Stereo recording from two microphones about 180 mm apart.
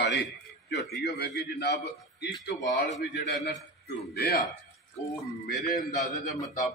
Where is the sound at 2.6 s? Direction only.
45° left (ahead or behind).